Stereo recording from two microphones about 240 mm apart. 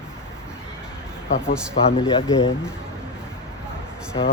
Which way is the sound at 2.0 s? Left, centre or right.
Centre.